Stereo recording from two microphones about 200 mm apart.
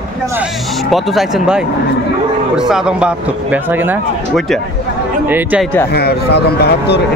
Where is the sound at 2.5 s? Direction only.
5° right (ahead or behind).